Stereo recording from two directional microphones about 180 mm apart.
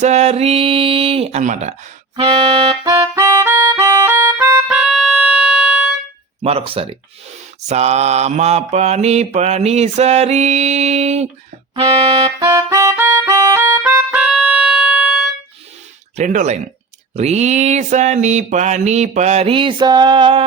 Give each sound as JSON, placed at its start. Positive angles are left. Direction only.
{"t": 0.0, "sound": "mantra", "side_deg": -40}
{"t": 2.2, "sound": "mantra", "side_deg": -30}
{"t": 2.9, "sound": "music", "side_deg": -15}
{"t": 6.4, "sound": "mantra", "side_deg": -35}
{"t": 12.2, "sound": "music", "side_deg": -15}
{"t": 16.1, "sound": "speech", "side_deg": -45}
{"t": 17.2, "sound": "mantra", "side_deg": -40}